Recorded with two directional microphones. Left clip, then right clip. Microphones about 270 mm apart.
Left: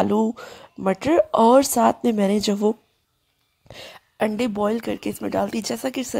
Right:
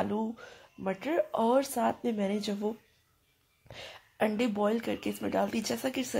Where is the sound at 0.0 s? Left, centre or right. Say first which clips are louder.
Left 12 dB; left.